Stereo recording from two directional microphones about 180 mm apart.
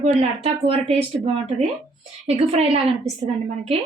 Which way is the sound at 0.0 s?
35° right (ahead or behind).